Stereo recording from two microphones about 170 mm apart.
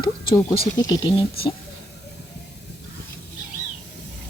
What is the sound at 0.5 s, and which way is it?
Speech, 30° left (ahead or behind).